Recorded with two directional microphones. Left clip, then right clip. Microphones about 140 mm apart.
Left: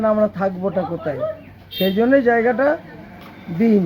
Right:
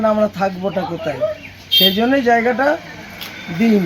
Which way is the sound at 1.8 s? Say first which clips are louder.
Left 1 dB; 15° left (ahead or behind).